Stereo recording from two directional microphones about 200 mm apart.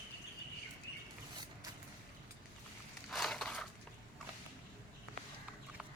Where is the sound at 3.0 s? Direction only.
Centre (ahead or behind).